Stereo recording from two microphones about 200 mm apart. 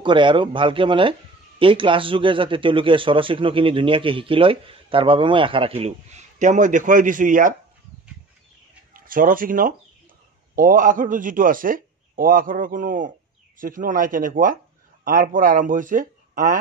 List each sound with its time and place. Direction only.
0.0 s a man's voice: 25° right (ahead or behind); by 7.5 s 40° right (ahead or behind)
8.9 s speech: 45° right (ahead or behind)